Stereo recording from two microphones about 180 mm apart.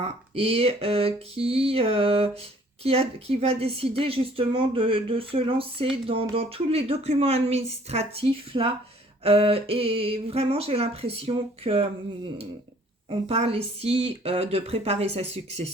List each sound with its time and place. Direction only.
0.0 s speech: 30° right (ahead or behind)
13.1 s speech: 35° right (ahead or behind)